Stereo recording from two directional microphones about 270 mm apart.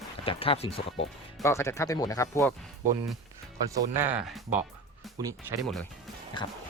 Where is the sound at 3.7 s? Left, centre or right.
Centre.